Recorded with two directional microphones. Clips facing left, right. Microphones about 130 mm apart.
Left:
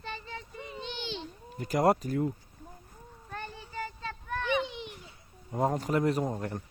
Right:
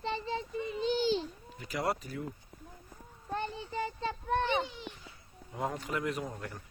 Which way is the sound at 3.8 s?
25° right (ahead or behind).